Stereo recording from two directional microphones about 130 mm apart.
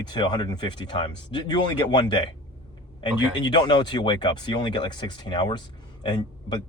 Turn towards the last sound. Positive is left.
turn(degrees=35)  # may be behind; listen again after turning